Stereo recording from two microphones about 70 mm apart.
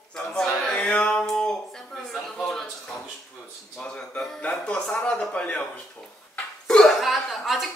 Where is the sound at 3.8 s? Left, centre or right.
Centre.